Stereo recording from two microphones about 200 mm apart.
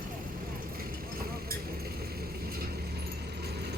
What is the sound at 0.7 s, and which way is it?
Vehicle, 45° right (ahead or behind).